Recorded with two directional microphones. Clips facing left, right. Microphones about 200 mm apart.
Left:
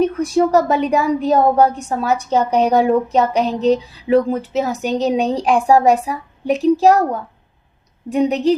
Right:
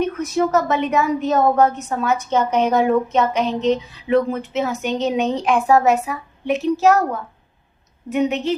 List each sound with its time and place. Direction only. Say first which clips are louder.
0.0 s a woman's voice: left 4 dB; 30° left (ahead or behind)